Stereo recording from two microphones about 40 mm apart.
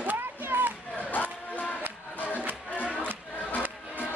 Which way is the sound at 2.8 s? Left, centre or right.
Right.